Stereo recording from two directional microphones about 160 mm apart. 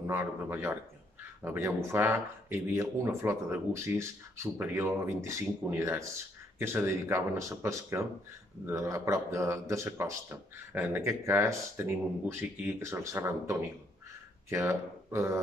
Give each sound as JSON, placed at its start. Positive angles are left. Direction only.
{"t": 0.0, "sound": "a man's voice", "side_deg": -15}